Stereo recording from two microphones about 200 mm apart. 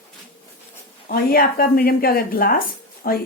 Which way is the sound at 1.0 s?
45° left (ahead or behind).